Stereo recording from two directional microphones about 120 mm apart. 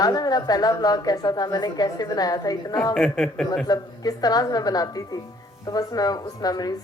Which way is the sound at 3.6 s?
35° left (ahead or behind).